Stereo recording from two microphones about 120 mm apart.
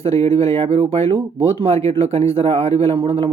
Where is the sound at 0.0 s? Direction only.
60° right (ahead or behind).